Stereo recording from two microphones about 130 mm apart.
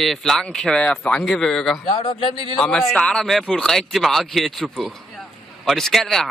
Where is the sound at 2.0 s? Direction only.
40° left (ahead or behind).